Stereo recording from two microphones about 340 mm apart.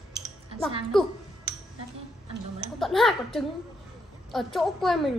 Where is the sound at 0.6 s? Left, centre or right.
Centre.